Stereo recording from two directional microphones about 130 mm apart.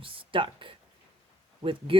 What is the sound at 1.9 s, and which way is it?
Speech, 45° right (ahead or behind).